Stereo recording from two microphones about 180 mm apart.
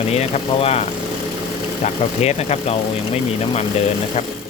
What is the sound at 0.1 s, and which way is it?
Speech, 35° left (ahead or behind).